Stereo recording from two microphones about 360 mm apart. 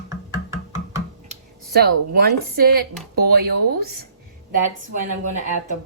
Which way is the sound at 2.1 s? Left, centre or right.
Right.